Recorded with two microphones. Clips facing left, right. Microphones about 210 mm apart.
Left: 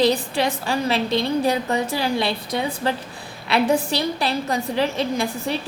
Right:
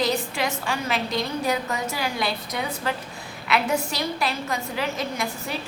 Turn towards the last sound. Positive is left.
turn(degrees=30)  # may be behind; listen again after turning